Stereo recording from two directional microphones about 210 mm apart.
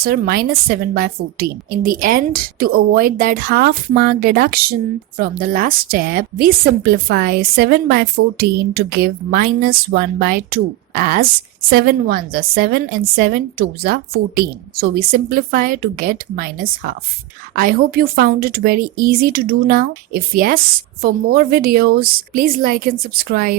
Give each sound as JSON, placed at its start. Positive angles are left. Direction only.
{"t": 0.0, "sound": "a woman's voice", "side_deg": -45}